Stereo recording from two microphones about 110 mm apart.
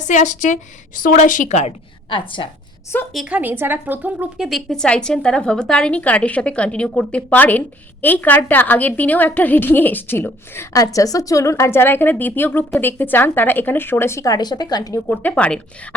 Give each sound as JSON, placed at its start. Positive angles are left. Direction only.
{"t": 0.0, "sound": "a woman's voice", "side_deg": 90}
{"t": 2.0, "sound": "a woman's voice", "side_deg": 50}
{"t": 2.9, "sound": "a woman's voice", "side_deg": 20}
{"t": 3.2, "sound": "a woman's voice", "side_deg": -15}
{"t": 4.4, "sound": "a woman's voice", "side_deg": 0}
{"t": 15.1, "sound": "a woman's voice", "side_deg": 15}